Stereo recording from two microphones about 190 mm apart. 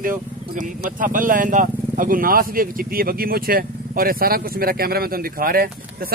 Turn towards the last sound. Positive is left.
turn(degrees=-50)  # may be behind; listen again after turning